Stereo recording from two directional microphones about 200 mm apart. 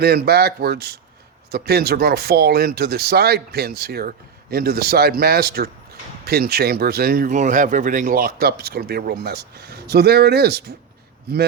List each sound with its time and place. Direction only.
0.0 s speech: 55° right (ahead or behind)